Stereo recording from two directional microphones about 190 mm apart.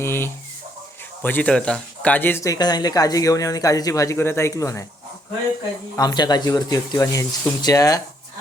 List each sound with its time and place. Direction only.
0.0 s speech: 10° left (ahead or behind)
6.0 s speech: 20° left (ahead or behind)